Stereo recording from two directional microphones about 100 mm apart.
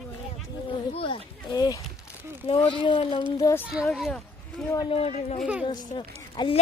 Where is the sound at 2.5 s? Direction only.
65° left (ahead or behind).